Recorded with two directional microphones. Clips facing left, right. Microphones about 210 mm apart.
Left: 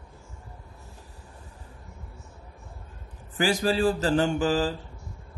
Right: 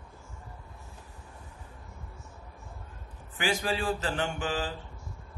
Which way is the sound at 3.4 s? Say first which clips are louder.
Left 7 dB; 40° left (ahead or behind).